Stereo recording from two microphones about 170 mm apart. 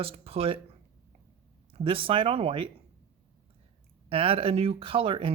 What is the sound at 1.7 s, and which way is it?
Speech, 30° right (ahead or behind).